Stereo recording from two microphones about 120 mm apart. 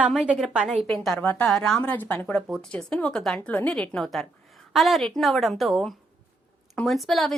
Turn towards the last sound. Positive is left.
turn(degrees=0)  # may be behind; listen again after turning